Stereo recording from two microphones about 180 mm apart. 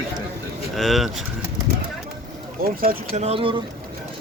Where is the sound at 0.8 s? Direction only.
Centre (ahead or behind).